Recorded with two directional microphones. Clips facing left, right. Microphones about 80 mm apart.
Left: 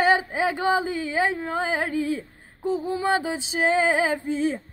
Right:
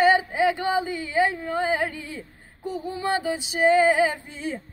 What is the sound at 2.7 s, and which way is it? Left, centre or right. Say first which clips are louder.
Female singing: left 3 dB; left.